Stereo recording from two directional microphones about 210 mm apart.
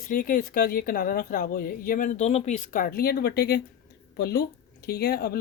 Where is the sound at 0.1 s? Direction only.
40° left (ahead or behind).